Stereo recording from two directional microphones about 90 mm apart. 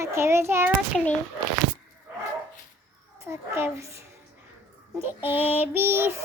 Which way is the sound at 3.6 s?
35° right (ahead or behind).